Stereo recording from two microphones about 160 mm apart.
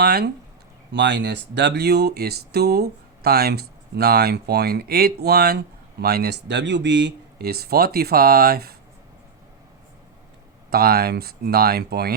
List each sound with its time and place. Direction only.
0.0 s speech: 85° right
10.7 s speech: 75° right (ahead or behind)